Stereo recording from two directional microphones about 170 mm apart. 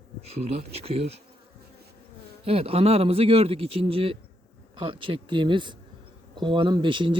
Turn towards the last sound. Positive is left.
turn(degrees=-30)  # may be behind; listen again after turning